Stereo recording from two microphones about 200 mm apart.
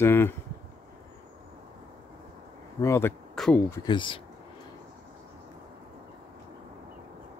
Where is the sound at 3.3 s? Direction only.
5° left (ahead or behind).